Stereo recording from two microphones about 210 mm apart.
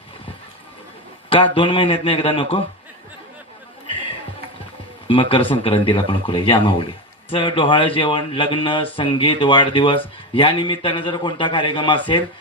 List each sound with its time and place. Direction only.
1.3 s a man's voice: 25° left (ahead or behind)
3.8 s a sound: 25° left (ahead or behind)
5.0 s a man's voice: 25° left (ahead or behind)